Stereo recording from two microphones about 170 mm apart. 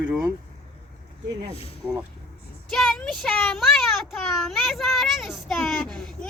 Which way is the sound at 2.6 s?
5° left (ahead or behind).